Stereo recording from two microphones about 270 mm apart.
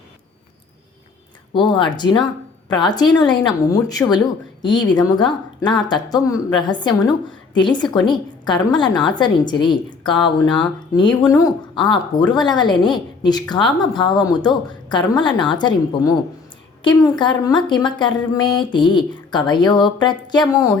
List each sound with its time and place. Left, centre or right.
1.5 s speech: centre